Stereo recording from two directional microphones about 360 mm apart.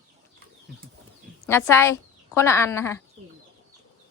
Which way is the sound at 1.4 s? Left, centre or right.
Centre.